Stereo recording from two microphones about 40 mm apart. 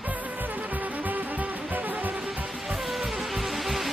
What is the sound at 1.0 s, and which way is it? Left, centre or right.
Music, right.